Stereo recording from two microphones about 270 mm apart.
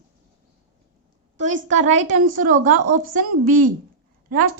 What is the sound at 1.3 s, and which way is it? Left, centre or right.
A woman's voice, right.